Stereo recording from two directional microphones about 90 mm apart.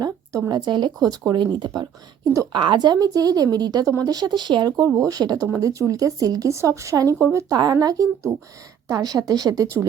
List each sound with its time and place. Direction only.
0.0 s a woman's voice: 45° right (ahead or behind)
0.9 s speech: 45° right (ahead or behind)
4.9 s speech: 40° right (ahead or behind)